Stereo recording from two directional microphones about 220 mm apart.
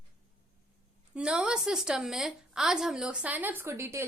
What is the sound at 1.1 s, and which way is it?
A woman's voice, 5° right (ahead or behind).